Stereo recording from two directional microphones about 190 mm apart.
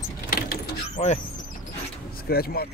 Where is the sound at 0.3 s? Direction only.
45° left (ahead or behind).